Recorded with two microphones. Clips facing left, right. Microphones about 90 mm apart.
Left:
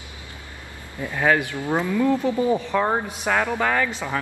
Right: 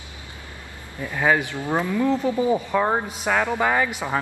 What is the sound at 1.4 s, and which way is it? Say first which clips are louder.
Speech: left 1 dB; 20° right (ahead or behind).